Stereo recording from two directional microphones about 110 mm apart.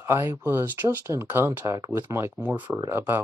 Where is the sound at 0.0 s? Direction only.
25° right (ahead or behind).